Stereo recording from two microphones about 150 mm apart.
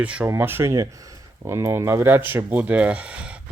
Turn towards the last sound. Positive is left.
turn(degrees=-10)  # may be behind; listen again after turning